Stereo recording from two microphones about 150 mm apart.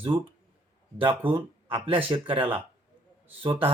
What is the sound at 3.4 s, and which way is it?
Speech, 40° right (ahead or behind).